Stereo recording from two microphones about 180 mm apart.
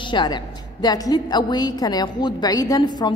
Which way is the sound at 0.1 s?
25° left (ahead or behind).